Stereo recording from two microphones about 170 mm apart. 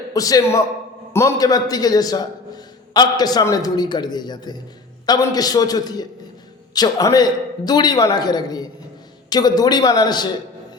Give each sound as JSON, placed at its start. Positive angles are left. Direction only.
{"t": 0.1, "sound": "a man's voice", "side_deg": 20}